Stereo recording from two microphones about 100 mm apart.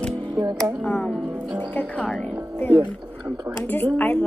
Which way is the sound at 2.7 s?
15° right (ahead or behind).